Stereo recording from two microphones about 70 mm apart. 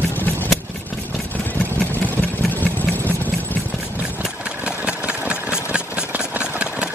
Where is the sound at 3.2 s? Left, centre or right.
Left.